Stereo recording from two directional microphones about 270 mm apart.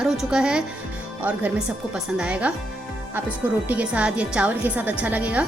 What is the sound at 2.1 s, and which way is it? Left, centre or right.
Speech, centre.